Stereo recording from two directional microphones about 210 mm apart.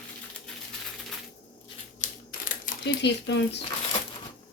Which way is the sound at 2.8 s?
55° left (ahead or behind).